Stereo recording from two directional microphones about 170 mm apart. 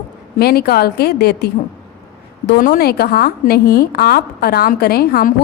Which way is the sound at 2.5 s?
55° left (ahead or behind).